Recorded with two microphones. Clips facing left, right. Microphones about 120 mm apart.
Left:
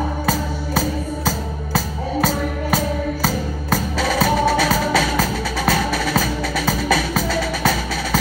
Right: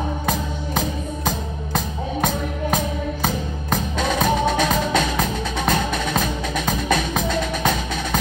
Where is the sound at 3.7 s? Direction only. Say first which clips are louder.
Left 2 dB; 20° right (ahead or behind).